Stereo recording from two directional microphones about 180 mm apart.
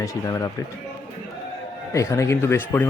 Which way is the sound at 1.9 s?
15° left (ahead or behind).